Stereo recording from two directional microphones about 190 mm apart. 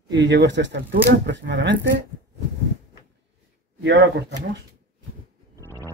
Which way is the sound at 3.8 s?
65° right (ahead or behind).